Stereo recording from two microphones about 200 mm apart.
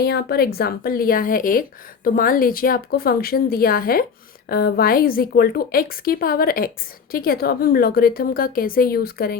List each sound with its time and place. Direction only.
0.0 s a woman's voice: 55° left (ahead or behind)